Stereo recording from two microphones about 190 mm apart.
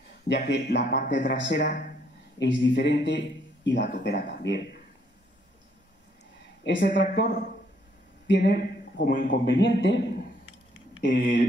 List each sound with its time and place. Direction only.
0.3 s a man's voice: 65° left (ahead or behind)
6.6 s a man's voice: 70° left (ahead or behind); by 9.4 s 45° left (ahead or behind)
9.5 s a man's voice: 70° left (ahead or behind)
11.0 s speech: 55° left (ahead or behind)